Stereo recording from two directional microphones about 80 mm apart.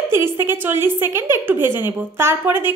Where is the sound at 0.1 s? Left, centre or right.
Right.